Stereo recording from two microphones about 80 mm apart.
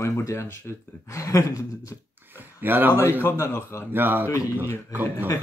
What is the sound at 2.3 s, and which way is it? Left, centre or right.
Speech, right.